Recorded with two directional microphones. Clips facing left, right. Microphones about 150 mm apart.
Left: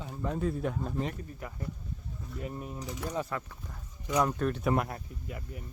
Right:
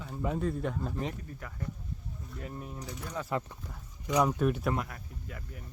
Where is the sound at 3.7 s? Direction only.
Centre (ahead or behind).